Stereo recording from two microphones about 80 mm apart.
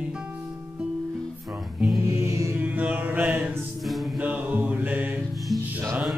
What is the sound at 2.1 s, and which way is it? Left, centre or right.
Music, right.